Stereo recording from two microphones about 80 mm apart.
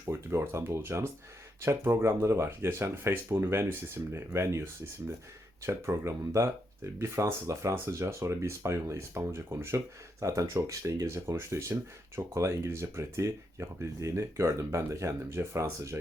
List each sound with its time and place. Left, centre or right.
0.0 s speech: right